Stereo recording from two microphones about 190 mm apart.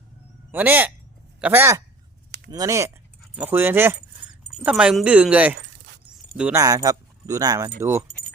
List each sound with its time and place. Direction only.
0.5 s speech: 10° right (ahead or behind)
6.1 s zipper: 5° right (ahead or behind)
6.6 s speech: 20° right (ahead or behind)